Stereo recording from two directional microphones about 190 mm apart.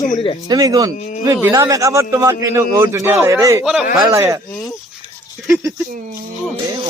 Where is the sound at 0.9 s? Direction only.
40° left (ahead or behind).